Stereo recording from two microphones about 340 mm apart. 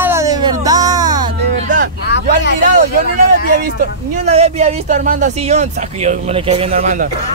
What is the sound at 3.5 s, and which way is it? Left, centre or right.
Speech, right.